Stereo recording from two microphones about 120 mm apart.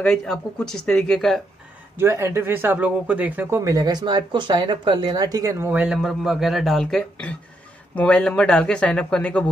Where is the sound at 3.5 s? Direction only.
30° right (ahead or behind); by 5.9 s 15° right (ahead or behind).